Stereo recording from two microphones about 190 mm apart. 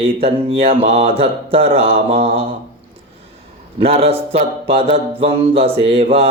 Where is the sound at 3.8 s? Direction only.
30° right (ahead or behind).